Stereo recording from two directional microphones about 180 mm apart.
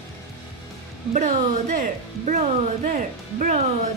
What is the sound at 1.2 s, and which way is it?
Speech, 45° right (ahead or behind).